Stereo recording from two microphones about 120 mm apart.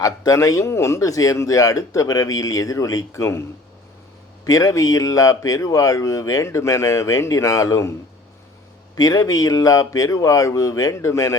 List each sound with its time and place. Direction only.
0.0 s speech: 30° left (ahead or behind)
4.4 s speech: 30° left (ahead or behind)
9.0 s speech: 30° left (ahead or behind)